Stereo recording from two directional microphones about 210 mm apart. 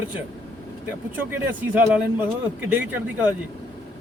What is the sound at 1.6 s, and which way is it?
Speech, 10° right (ahead or behind).